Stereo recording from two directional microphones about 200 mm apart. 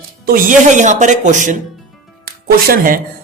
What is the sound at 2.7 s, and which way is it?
Speech, 45° right (ahead or behind).